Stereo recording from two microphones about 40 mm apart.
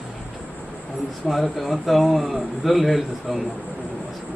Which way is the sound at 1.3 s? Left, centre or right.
Centre.